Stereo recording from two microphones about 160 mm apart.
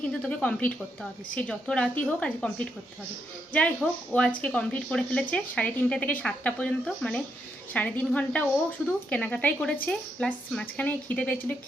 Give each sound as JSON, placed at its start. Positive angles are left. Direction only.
{"t": 0.1, "sound": "a woman's voice", "side_deg": 5}